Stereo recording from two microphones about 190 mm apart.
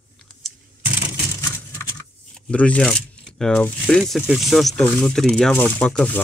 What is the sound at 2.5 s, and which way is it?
Speech, 5° left (ahead or behind).